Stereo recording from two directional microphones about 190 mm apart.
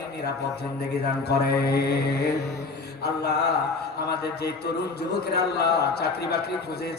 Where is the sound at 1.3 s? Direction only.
55° left (ahead or behind).